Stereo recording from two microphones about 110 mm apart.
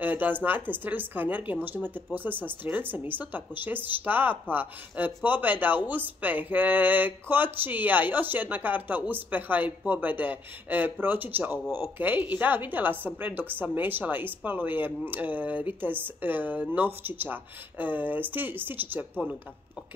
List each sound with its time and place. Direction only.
0.0 s speech: 15° right (ahead or behind)